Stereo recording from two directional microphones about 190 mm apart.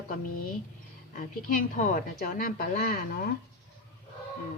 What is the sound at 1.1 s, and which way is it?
A woman's voice, 45° left (ahead or behind).